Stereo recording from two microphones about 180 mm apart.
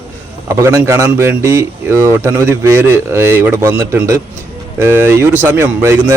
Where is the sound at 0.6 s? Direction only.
15° right (ahead or behind).